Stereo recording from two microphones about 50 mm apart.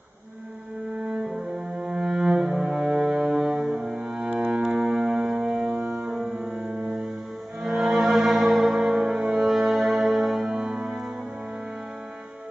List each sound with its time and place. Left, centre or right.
0.9 s cello: centre
1.8 s music: centre